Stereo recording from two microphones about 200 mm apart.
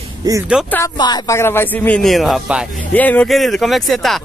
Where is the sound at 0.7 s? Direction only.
10° left (ahead or behind).